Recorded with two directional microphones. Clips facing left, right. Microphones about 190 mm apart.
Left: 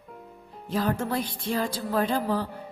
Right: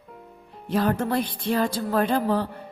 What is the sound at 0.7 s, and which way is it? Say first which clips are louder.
Speech: right 4 dB; 60° right (ahead or behind).